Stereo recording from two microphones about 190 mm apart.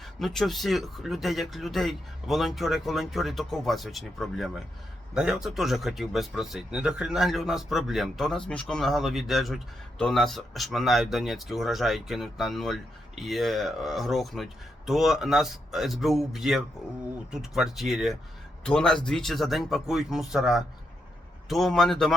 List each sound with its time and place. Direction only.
0.0 s speech: centre (ahead or behind)